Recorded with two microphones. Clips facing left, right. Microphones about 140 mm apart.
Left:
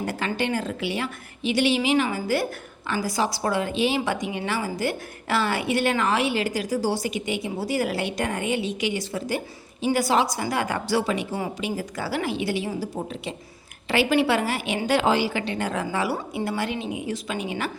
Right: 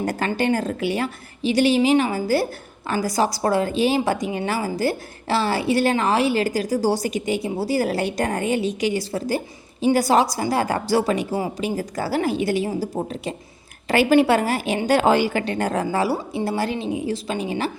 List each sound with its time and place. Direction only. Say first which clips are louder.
0.0 s a woman's voice: right 4 dB; 40° right (ahead or behind)